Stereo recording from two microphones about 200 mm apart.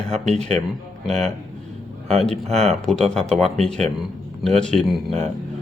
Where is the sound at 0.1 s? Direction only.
35° right (ahead or behind).